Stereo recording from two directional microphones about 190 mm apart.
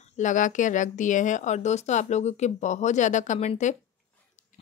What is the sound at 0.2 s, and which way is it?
Speech, 40° left (ahead or behind).